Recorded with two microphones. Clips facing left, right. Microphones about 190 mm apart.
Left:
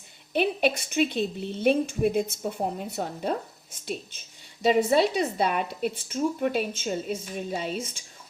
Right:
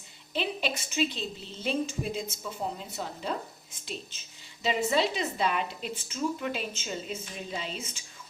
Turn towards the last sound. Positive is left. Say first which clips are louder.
# left 6 dB
turn(degrees=50)  # may be behind; listen again after turning